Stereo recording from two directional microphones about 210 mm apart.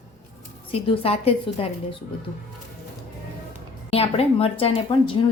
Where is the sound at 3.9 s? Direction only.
30° left (ahead or behind).